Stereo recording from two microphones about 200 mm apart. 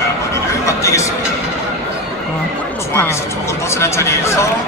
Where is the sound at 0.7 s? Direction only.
15° left (ahead or behind).